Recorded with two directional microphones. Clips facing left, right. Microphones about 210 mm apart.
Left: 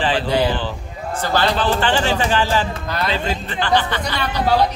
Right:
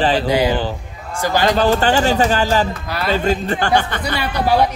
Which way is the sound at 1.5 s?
40° right (ahead or behind).